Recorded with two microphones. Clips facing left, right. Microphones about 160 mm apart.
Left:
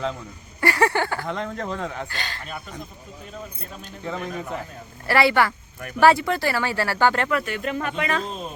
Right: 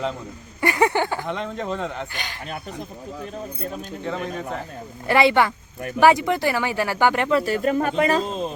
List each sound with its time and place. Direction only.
0.6 s speech: 15° right (ahead or behind)
1.3 s speech: centre (ahead or behind)
2.0 s speech: 15° right (ahead or behind)
4.0 s speech: 5° left (ahead or behind)
5.0 s speech: 20° right (ahead or behind)
7.3 s speech: 35° right (ahead or behind)
8.2 s speech: 25° right (ahead or behind)